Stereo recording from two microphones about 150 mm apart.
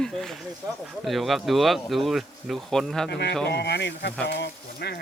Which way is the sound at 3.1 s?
90° left.